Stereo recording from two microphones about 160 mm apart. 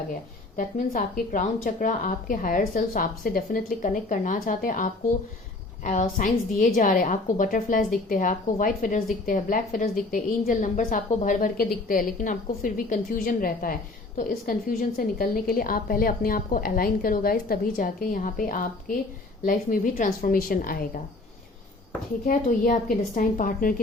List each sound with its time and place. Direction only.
0.5 s a woman's voice: 55° left (ahead or behind)
22.3 s a woman's voice: 55° left (ahead or behind)